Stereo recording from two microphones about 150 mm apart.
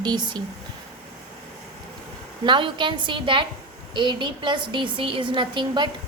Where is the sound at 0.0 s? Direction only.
30° right (ahead or behind).